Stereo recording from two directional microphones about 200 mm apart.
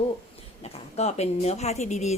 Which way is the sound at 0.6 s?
30° left (ahead or behind).